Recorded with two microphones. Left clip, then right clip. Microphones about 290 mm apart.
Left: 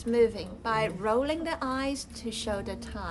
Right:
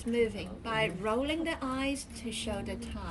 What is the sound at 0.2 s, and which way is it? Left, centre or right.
A woman's voice, left.